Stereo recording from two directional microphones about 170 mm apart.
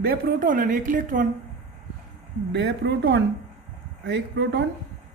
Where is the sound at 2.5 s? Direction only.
90° right.